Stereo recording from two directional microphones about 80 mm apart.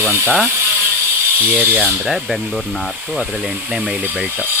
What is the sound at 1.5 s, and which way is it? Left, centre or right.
Speech, right.